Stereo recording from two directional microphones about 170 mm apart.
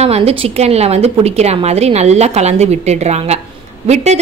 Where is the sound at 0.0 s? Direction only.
35° right (ahead or behind).